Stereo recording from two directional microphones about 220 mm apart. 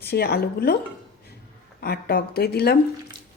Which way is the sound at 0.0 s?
45° left (ahead or behind).